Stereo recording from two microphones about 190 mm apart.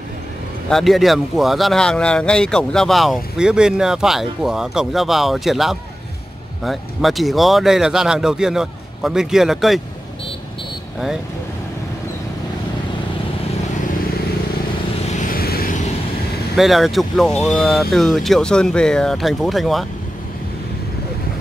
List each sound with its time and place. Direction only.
0.7 s speech: centre (ahead or behind)
15.0 s vehicle: 50° left (ahead or behind)
16.5 s speech: centre (ahead or behind)